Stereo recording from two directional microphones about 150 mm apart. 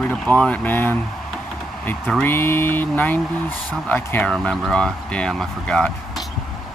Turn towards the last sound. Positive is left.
turn(degrees=5)  # may be behind; listen again after turning